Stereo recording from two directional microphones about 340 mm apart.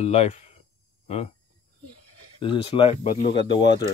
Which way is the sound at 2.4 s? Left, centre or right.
Centre.